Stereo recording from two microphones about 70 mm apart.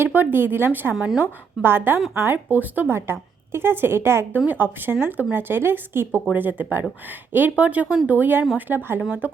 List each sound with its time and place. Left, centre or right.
0.0 s speech: right
0.9 s a woman's voice: centre
1.2 s speech: right
4.4 s speech: right